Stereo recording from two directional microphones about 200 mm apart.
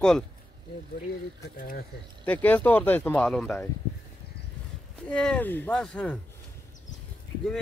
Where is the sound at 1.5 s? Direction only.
45° left (ahead or behind).